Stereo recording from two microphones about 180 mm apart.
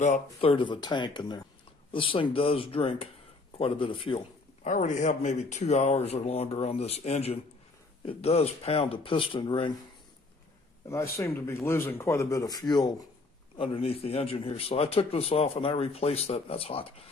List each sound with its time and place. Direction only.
0.0 s speech: 40° left (ahead or behind)
4.6 s a man's voice: 45° left (ahead or behind); by 9.7 s 30° left (ahead or behind)
11.1 s a man's voice: 15° left (ahead or behind); by 16.9 s 30° left (ahead or behind)